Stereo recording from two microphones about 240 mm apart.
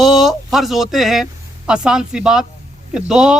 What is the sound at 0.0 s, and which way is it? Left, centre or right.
Speech, centre.